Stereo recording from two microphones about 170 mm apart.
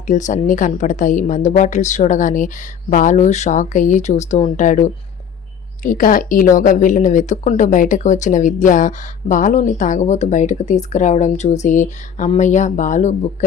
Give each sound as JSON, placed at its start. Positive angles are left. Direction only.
{"t": 0.1, "sound": "speech", "side_deg": 45}